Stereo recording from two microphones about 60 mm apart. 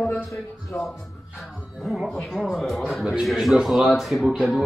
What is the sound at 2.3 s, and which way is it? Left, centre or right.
A man's voice, centre.